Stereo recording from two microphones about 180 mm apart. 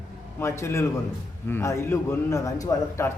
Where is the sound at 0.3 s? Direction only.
15° left (ahead or behind).